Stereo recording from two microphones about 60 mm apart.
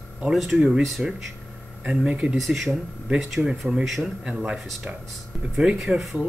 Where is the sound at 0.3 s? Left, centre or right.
Centre.